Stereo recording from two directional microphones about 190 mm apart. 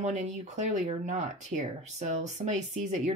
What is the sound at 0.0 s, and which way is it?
Speech, 40° right (ahead or behind).